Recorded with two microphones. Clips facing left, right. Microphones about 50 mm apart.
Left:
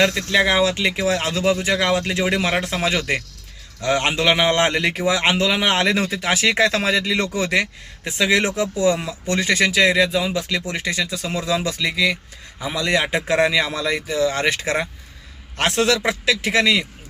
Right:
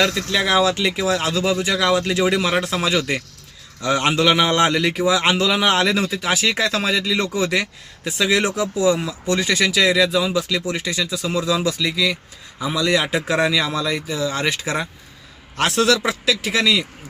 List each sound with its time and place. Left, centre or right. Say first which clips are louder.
0.3 s a man's voice: even; centre
0.9 s a man's voice: even; left
5.3 s a man's voice: right 1 dB; left
5.9 s speech: even; left